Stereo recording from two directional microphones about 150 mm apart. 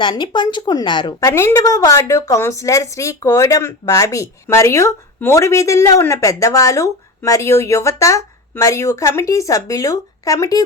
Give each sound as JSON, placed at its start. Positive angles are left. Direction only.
{"t": 0.0, "sound": "a woman's voice", "side_deg": 30}
{"t": 1.3, "sound": "a woman's voice", "side_deg": 20}